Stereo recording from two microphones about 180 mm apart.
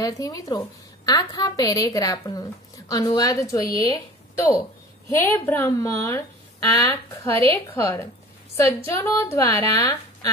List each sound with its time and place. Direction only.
0.0 s a woman's voice: 20° left (ahead or behind)